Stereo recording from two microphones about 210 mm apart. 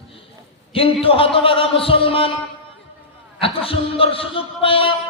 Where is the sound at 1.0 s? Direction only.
25° left (ahead or behind).